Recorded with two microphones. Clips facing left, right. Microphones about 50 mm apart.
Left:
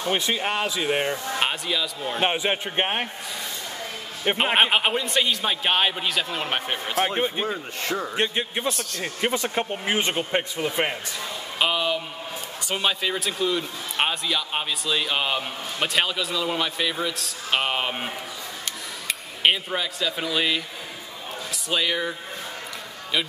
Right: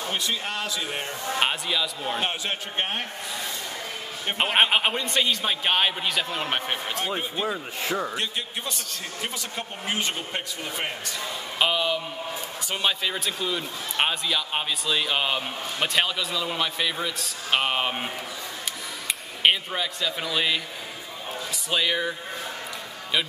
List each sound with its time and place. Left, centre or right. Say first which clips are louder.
0.1 s speech: left 6 dB; left
1.4 s speech: right 1 dB; centre
2.1 s speech: left 8 dB; left
4.6 s speech: right 2 dB; centre
7.1 s speech: left 4 dB; left
7.4 s speech: even; centre
8.2 s speech: left 5 dB; left
8.6 s speech: left 6 dB; centre
9.0 s speech: left 10 dB; left
11.1 s a sound: right 3 dB; centre
12.6 s speech: left 2 dB; centre
21.6 s speech: even; centre